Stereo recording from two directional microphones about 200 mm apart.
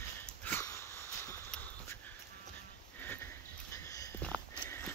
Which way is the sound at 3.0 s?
10° left (ahead or behind).